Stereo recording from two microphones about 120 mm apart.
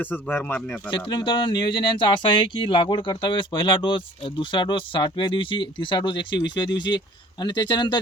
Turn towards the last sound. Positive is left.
turn(degrees=40)  # may be behind; listen again after turning